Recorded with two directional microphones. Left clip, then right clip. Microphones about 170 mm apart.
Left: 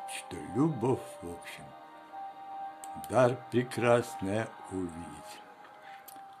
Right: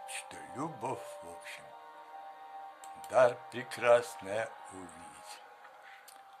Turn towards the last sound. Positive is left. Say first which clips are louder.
# left 4 dB
turn(degrees=10)  # may be behind; listen again after turning